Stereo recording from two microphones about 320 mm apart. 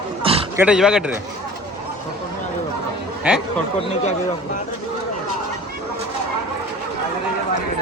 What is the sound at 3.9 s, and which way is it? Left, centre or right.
Speech, left.